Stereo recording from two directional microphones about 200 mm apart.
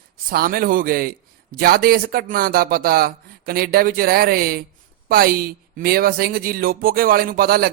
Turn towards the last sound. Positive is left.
turn(degrees=-50)  # may be behind; listen again after turning